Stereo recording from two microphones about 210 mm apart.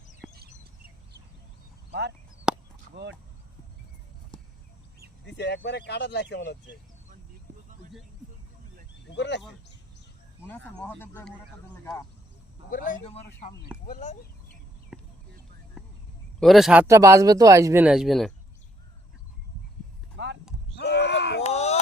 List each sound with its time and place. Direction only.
0.2 s chicken: centre (ahead or behind)
1.9 s speech: 55° right (ahead or behind)
2.5 s chop: 5° right (ahead or behind)
2.9 s speech: 55° right (ahead or behind)
4.3 s a sound: 20° left (ahead or behind)
5.2 s speech: 55° left (ahead or behind)
9.0 s speech: 55° left (ahead or behind)
10.4 s speech: 10° left (ahead or behind)
12.7 s speech: 40° left (ahead or behind)
14.9 s a sound: centre (ahead or behind)
16.4 s speech: centre (ahead or behind)
20.1 s horse: 55° right (ahead or behind)
20.7 s a sound: 55° left (ahead or behind)
21.4 s a sound: 30° left (ahead or behind)